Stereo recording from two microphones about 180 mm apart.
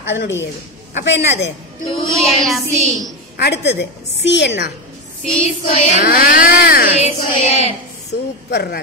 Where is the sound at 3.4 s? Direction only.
70° left (ahead or behind).